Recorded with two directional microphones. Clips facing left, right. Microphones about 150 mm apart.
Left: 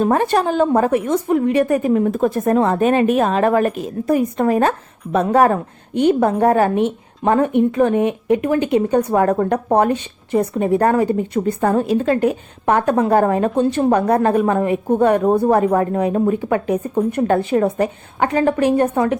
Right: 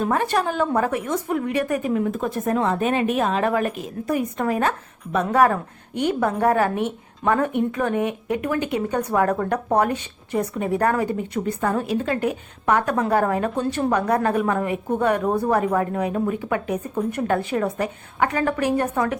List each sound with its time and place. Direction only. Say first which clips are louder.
0.0 s a woman's voice: left 5 dB; 30° left (ahead or behind)